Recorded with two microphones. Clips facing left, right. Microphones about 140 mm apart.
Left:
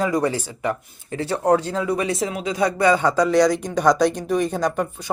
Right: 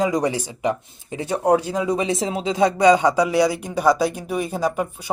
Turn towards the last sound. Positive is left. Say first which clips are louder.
# left 1 dB
turn(degrees=-5)  # may be behind; listen again after turning